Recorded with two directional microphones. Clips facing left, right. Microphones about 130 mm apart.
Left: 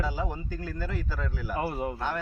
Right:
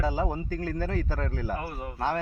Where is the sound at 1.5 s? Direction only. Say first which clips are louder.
Left 4 dB; 20° left (ahead or behind).